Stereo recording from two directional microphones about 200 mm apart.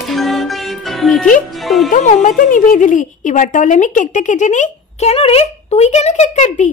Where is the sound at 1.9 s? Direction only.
40° left (ahead or behind).